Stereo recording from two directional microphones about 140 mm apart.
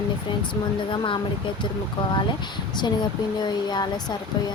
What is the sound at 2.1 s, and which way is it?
Speech, 30° left (ahead or behind).